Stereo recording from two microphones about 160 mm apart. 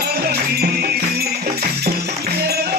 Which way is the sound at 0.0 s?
75° right (ahead or behind).